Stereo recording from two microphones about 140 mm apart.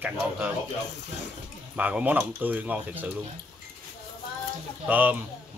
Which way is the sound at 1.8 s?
10° right (ahead or behind).